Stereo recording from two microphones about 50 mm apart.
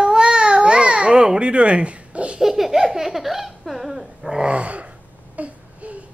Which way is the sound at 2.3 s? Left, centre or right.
Centre.